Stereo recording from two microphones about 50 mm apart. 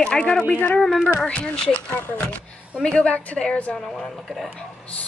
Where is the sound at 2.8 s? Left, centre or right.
Left.